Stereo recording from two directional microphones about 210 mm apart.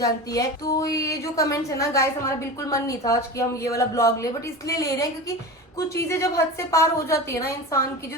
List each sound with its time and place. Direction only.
0.0 s a woman's voice: 15° left (ahead or behind)
6.1 s a woman's voice: 15° left (ahead or behind)